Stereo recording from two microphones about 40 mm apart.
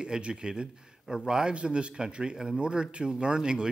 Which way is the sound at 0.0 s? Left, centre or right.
Right.